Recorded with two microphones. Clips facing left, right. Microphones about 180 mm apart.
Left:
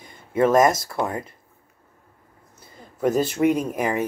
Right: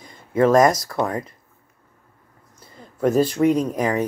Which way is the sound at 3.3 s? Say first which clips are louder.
Right 2 dB; 5° left (ahead or behind).